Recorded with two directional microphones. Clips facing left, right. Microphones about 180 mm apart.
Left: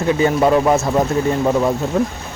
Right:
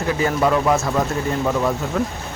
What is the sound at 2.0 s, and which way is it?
Speech, 30° left (ahead or behind).